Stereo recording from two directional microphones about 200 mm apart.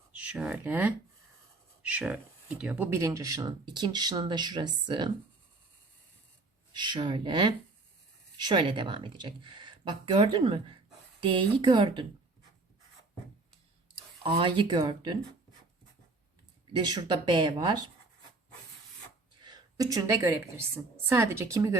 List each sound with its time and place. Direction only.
0.1 s speech: 5° right (ahead or behind); by 5.1 s 20° right (ahead or behind)
6.7 s speech: 20° right (ahead or behind)
14.3 s speech: 25° right (ahead or behind)
16.7 s speech: 25° right (ahead or behind)
19.4 s a woman's voice: 20° right (ahead or behind)